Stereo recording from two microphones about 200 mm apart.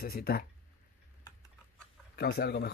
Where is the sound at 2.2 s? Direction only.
50° left (ahead or behind).